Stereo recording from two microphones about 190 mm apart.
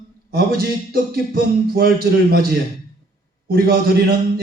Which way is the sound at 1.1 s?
55° right (ahead or behind).